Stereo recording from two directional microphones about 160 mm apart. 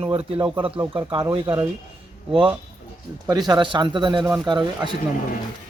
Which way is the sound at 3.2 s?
25° right (ahead or behind).